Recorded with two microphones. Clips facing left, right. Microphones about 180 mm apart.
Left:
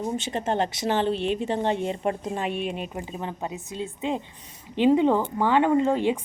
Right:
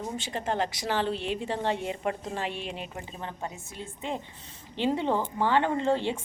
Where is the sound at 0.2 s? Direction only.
25° left (ahead or behind).